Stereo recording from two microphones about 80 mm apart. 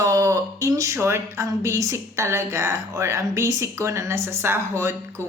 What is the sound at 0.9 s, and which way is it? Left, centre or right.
Speech, right.